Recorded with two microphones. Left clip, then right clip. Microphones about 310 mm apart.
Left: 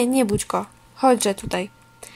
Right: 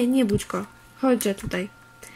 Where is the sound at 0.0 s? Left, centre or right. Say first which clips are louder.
Left 2 dB; centre.